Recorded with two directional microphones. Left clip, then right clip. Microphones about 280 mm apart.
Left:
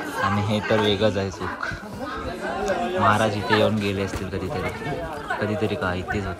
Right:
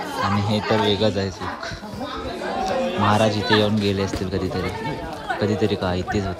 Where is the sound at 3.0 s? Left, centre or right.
Centre.